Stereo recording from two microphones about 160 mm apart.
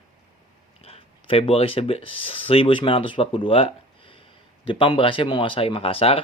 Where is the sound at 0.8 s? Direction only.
40° left (ahead or behind).